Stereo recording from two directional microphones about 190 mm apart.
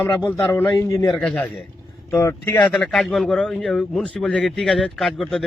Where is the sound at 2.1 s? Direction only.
15° left (ahead or behind).